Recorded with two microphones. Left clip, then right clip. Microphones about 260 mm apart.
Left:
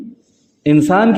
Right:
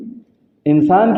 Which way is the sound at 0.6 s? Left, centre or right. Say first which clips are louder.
Even; left.